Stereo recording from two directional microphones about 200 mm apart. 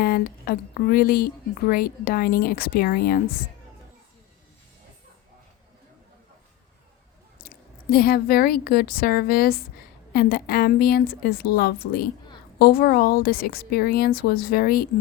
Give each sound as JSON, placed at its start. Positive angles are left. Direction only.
{"t": 0.0, "sound": "a woman's voice", "side_deg": 50}
{"t": 7.4, "sound": "a woman's voice", "side_deg": 50}